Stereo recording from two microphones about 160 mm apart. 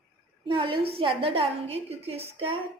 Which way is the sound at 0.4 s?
30° right (ahead or behind).